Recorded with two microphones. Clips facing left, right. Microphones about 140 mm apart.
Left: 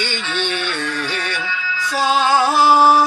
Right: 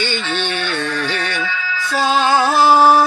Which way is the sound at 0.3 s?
10° left (ahead or behind).